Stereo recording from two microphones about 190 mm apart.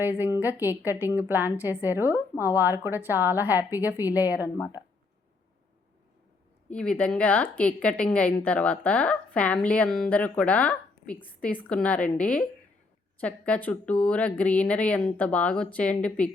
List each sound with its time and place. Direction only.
0.2 s a woman's voice: 10° right (ahead or behind)
6.7 s a woman's voice: 5° left (ahead or behind)